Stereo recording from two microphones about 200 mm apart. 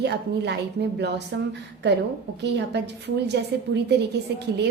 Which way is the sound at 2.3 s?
60° right (ahead or behind).